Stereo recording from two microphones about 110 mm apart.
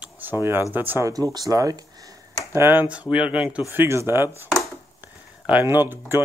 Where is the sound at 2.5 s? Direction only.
20° right (ahead or behind).